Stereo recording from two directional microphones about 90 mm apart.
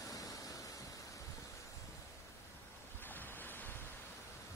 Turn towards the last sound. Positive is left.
turn(degrees=20)  # may be behind; listen again after turning